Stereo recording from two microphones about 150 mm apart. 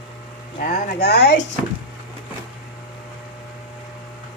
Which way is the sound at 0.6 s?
70° left (ahead or behind).